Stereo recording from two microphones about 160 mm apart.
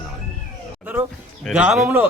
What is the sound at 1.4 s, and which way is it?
Speech, 5° right (ahead or behind).